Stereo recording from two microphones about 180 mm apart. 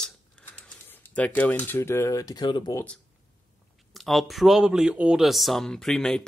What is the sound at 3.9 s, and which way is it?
A man's voice, centre (ahead or behind).